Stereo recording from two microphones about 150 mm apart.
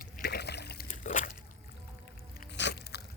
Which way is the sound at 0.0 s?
90° left.